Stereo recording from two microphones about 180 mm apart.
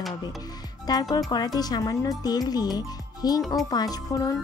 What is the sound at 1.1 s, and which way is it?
Speech, 20° left (ahead or behind).